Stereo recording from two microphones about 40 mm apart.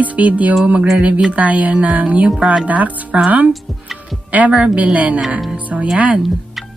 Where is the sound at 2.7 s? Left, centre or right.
Right.